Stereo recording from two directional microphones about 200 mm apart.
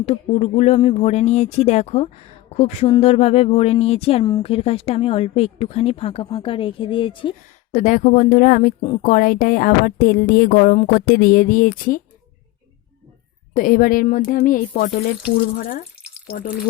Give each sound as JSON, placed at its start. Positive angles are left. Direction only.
{"t": 0.0, "sound": "speech", "side_deg": 30}
{"t": 7.8, "sound": "speech", "side_deg": 40}
{"t": 13.5, "sound": "speech", "side_deg": 45}